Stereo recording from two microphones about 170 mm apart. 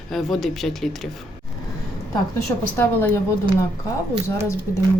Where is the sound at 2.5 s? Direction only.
20° left (ahead or behind).